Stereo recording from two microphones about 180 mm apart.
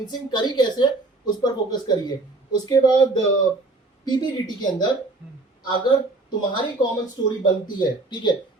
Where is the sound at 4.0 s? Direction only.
20° left (ahead or behind).